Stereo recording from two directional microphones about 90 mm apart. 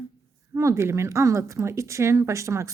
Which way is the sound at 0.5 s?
30° right (ahead or behind).